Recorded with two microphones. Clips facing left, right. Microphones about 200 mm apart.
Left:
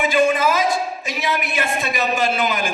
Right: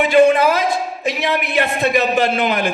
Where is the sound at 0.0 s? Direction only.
60° right (ahead or behind).